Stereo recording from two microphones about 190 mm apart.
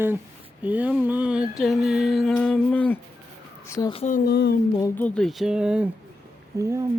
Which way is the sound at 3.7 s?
20° left (ahead or behind).